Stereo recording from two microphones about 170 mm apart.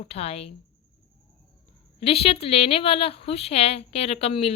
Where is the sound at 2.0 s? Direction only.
35° left (ahead or behind).